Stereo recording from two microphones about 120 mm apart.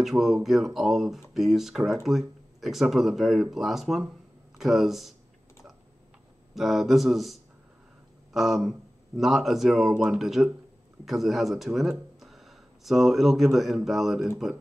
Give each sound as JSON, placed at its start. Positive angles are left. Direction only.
{"t": 0.0, "sound": "speech", "side_deg": 0}
{"t": 6.5, "sound": "speech", "side_deg": 0}